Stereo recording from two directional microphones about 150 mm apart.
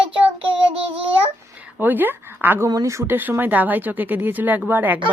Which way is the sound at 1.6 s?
10° right (ahead or behind).